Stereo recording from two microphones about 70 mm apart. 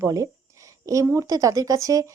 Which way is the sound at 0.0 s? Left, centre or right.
Right.